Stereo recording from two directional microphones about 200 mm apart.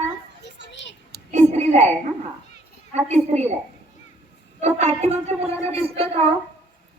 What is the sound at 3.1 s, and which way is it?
Speech, 35° right (ahead or behind).